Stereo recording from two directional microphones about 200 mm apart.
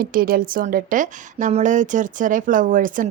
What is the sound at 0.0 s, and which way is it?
A woman's voice, 45° right (ahead or behind).